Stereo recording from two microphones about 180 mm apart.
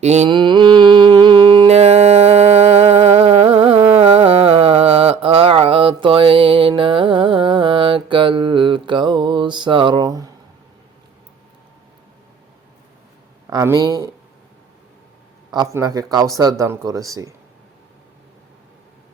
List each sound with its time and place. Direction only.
0.0 s mantra: 35° right (ahead or behind)
0.3 s a sound: 25° right (ahead or behind)
13.5 s speech: 20° right (ahead or behind)
15.5 s speech: 20° right (ahead or behind)